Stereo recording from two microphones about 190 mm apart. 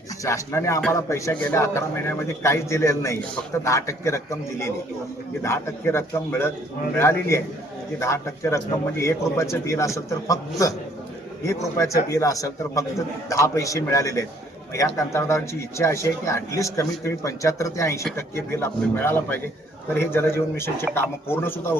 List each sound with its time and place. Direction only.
0.3 s a man's voice: 15° left (ahead or behind)
11.4 s a man's voice: 15° left (ahead or behind)